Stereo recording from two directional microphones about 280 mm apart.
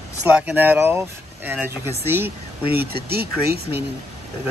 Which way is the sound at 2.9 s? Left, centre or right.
Right.